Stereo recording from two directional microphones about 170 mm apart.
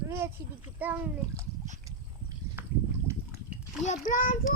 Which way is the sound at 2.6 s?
10° right (ahead or behind).